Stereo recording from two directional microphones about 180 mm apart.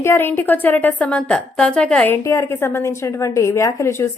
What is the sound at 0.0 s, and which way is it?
A woman's voice, 15° left (ahead or behind).